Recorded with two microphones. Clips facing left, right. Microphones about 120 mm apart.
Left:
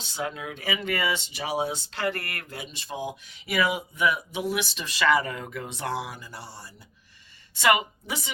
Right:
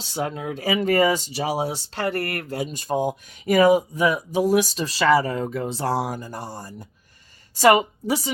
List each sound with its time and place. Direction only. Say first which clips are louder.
0.0 s a woman's voice: right 5 dB; 35° right (ahead or behind)